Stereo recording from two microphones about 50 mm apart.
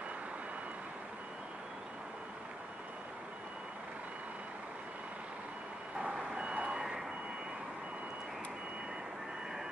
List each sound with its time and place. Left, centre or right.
6.1 s reversing beeps: centre